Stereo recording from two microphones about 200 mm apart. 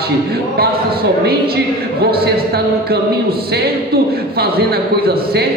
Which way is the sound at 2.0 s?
50° right (ahead or behind).